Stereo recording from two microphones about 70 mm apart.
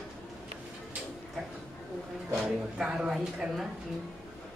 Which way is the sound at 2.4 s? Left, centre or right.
Centre.